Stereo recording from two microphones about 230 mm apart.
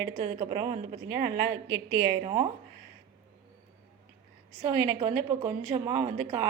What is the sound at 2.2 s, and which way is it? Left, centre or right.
Speech, right.